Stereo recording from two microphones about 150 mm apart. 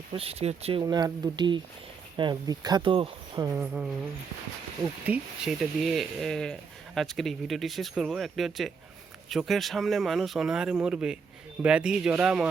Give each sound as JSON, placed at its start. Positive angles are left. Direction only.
{"t": 0.1, "sound": "speech", "side_deg": -40}
{"t": 3.5, "sound": "speech", "side_deg": -10}
{"t": 5.0, "sound": "speech", "side_deg": -5}